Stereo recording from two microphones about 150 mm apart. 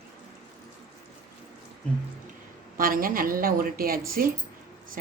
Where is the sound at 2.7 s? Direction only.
70° right (ahead or behind).